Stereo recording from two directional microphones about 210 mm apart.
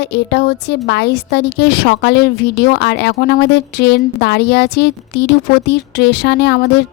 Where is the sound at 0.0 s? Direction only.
50° left (ahead or behind).